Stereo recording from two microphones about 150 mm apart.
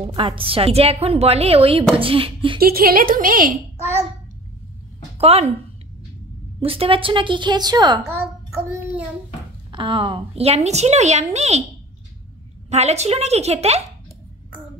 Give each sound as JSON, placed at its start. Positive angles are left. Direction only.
{"t": 0.1, "sound": "a woman's voice", "side_deg": -35}
{"t": 2.6, "sound": "a woman's voice", "side_deg": -80}
{"t": 5.1, "sound": "a woman's voice", "side_deg": -45}
{"t": 6.6, "sound": "a woman's voice", "side_deg": -40}
{"t": 9.7, "sound": "a woman's voice", "side_deg": -35}
{"t": 12.6, "sound": "a woman's voice", "side_deg": -45}